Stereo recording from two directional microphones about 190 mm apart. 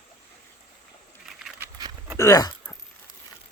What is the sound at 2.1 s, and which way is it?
Speech, 15° left (ahead or behind).